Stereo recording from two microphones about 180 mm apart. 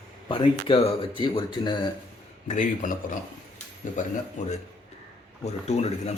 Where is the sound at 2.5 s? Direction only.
45° left (ahead or behind).